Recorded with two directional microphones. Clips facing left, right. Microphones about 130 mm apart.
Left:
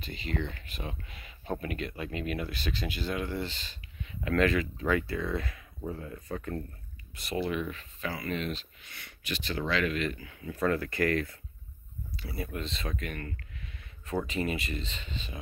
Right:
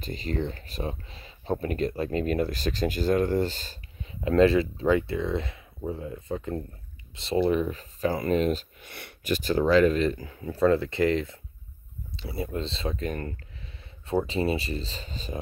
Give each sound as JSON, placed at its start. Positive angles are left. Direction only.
{"t": 0.0, "sound": "speech", "side_deg": -40}
{"t": 4.1, "sound": "speech", "side_deg": -30}